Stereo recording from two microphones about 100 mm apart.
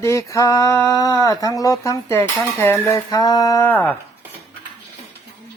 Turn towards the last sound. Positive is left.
turn(degrees=20)  # may be behind; listen again after turning